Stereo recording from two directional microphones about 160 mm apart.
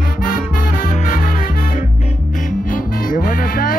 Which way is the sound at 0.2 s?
60° left (ahead or behind).